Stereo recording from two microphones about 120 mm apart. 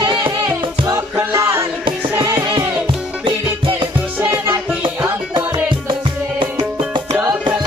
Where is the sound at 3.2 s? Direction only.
45° right (ahead or behind).